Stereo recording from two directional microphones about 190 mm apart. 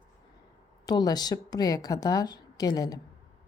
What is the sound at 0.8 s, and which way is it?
A woman's voice, 20° left (ahead or behind).